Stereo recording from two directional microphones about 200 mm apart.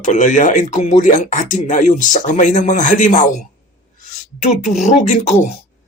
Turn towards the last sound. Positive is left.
turn(degrees=35)  # may be behind; listen again after turning